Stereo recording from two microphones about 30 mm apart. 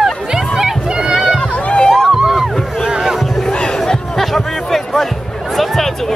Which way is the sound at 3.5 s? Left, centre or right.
Left.